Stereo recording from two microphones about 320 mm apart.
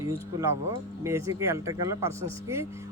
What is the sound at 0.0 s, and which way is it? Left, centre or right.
Speech, centre.